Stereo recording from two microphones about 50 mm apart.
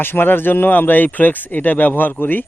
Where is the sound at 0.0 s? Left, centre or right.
Left.